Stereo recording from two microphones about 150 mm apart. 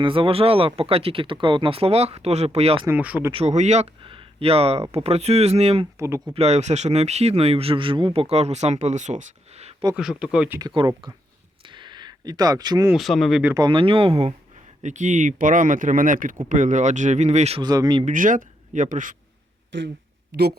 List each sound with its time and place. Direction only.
0.0 s speech: 35° right (ahead or behind)
2.8 s speech: 10° right (ahead or behind)
3.3 s speech: 50° right (ahead or behind)
9.9 s speech: 5° right (ahead or behind)
10.8 s speech: 30° right (ahead or behind)
11.6 s a sound: 30° right (ahead or behind)
12.9 s speech: centre (ahead or behind)
13.5 s speech: 30° right (ahead or behind)
14.8 s speech: 55° right (ahead or behind)
17.6 s speech: 25° right (ahead or behind)
18.0 s speech: 60° right (ahead or behind)